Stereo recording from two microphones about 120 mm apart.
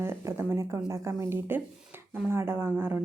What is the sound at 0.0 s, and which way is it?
Speech, 20° right (ahead or behind).